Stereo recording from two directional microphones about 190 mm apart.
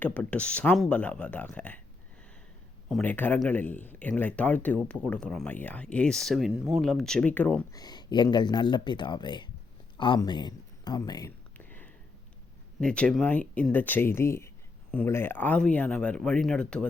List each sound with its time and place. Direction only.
0.0 s speech: 5° left (ahead or behind)
2.9 s speech: 10° left (ahead or behind)
7.8 s speech: 20° left (ahead or behind)
10.0 s a sound: 25° left (ahead or behind); by 11.9 s 10° left (ahead or behind)
12.8 s speech: 5° left (ahead or behind)